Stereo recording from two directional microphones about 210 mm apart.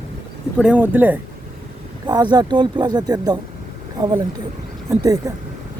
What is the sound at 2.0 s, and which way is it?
Speech, 20° right (ahead or behind).